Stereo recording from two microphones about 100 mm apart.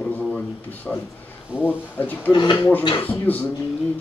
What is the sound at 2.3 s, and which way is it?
Speech, 50° left (ahead or behind).